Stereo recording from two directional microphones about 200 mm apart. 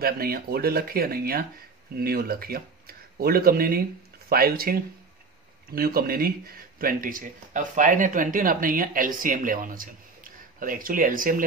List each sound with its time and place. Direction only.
0.0 s speech: 50° right (ahead or behind)